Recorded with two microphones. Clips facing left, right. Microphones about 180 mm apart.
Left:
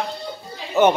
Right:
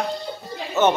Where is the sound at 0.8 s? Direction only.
15° left (ahead or behind).